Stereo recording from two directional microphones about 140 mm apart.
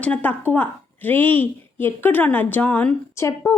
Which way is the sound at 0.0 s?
10° left (ahead or behind).